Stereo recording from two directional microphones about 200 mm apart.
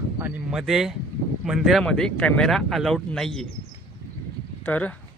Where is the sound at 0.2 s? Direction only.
5° right (ahead or behind).